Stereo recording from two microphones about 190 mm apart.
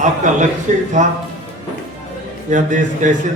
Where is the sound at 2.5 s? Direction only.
40° right (ahead or behind).